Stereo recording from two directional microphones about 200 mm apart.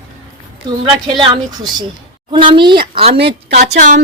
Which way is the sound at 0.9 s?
20° right (ahead or behind).